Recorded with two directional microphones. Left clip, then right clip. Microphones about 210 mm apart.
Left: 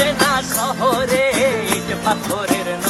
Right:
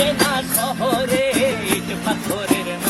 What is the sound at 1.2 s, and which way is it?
Music, 45° left (ahead or behind).